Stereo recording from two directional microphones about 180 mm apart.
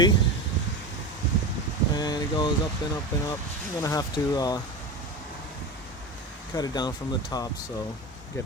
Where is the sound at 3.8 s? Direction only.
20° left (ahead or behind).